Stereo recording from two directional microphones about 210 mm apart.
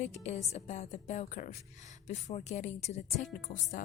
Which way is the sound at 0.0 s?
30° left (ahead or behind).